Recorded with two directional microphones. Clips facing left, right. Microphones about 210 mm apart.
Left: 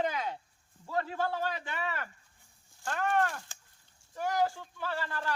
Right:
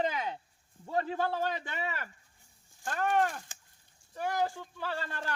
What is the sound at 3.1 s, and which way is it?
Speech, 15° right (ahead or behind).